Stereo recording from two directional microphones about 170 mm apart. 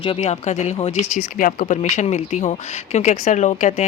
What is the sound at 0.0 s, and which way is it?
Speech, 35° left (ahead or behind).